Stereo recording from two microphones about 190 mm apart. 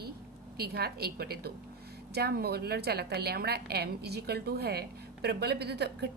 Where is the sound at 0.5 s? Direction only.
55° right (ahead or behind).